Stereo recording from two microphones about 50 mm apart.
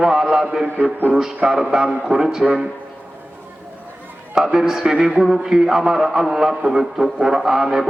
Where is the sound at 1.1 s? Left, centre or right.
Centre.